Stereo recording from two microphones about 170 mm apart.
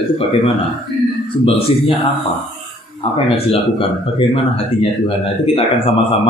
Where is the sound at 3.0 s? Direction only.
35° left (ahead or behind).